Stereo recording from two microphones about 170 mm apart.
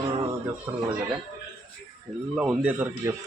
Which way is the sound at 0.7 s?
15° right (ahead or behind).